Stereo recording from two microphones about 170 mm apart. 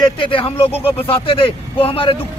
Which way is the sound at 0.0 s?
30° left (ahead or behind).